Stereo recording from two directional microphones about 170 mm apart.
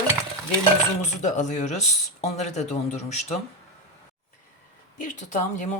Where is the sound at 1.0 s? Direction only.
45° left (ahead or behind).